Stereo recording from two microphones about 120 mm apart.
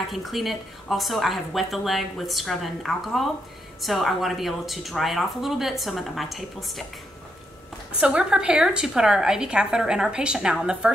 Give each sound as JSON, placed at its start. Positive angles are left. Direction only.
{"t": 0.1, "sound": "a woman's voice", "side_deg": 0}
{"t": 8.0, "sound": "a woman's voice", "side_deg": -5}